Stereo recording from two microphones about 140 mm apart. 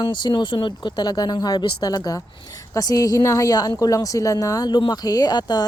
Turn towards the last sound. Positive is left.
turn(degrees=30)  # may be behind; listen again after turning